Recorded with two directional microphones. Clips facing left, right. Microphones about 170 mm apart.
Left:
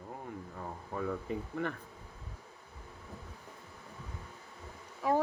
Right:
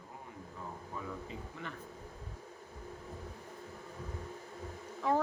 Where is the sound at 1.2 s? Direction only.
55° left (ahead or behind).